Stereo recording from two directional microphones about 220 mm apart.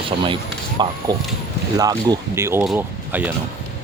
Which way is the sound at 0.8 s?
20° right (ahead or behind).